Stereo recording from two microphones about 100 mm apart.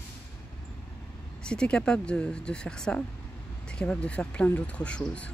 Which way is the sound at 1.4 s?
10° left (ahead or behind).